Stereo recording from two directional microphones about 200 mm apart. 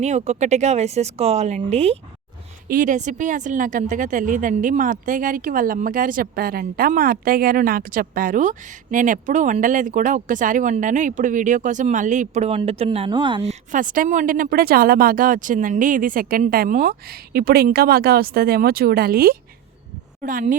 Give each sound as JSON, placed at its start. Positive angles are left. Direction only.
{"t": 0.0, "sound": "speech", "side_deg": -35}
{"t": 2.6, "sound": "speech", "side_deg": -40}